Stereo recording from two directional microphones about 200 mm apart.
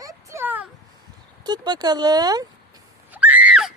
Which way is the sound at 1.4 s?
20° right (ahead or behind).